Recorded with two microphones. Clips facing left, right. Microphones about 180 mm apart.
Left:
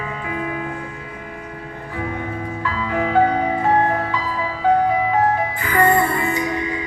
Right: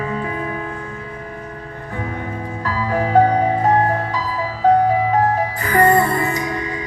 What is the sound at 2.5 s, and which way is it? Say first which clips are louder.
Music: right 4 dB; 40° right (ahead or behind).